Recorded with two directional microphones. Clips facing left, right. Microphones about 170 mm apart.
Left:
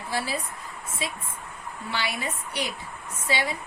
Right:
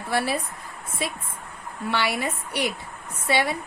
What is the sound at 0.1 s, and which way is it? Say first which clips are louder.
Speech: right 5 dB; 60° right (ahead or behind).